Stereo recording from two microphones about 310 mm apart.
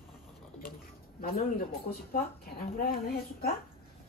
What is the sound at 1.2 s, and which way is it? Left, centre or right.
Speech, left.